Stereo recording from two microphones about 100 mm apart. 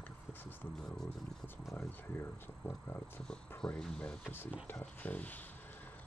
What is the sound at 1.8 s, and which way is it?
Speech, 25° left (ahead or behind).